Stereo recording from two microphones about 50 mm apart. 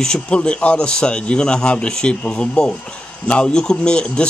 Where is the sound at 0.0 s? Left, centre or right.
Centre.